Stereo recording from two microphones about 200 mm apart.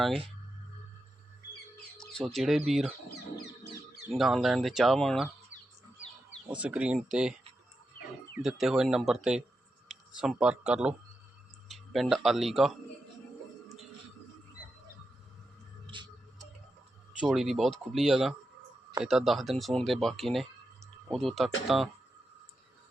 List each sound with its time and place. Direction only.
2.1 s speech: centre (ahead or behind)
4.1 s speech: centre (ahead or behind)
6.6 s speech: 5° right (ahead or behind)
8.4 s speech: centre (ahead or behind)
9.9 s a sound: 5° right (ahead or behind)
10.4 s speech: 5° right (ahead or behind)
15.9 s music: 25° right (ahead or behind)
17.2 s speech: 5° right (ahead or behind)